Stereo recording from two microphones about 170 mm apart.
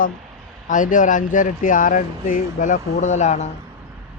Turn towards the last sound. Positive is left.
turn(degrees=45)  # may be behind; listen again after turning